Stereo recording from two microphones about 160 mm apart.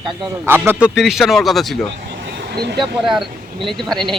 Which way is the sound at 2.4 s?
85° right.